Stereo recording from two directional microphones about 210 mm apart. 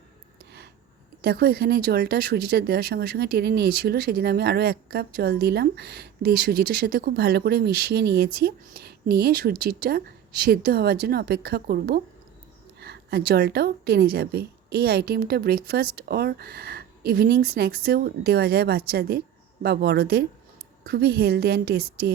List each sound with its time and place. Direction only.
1.2 s speech: 50° right (ahead or behind)